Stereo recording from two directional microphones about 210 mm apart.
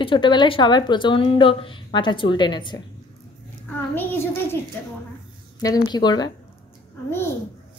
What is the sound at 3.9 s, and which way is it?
Speech, 10° left (ahead or behind).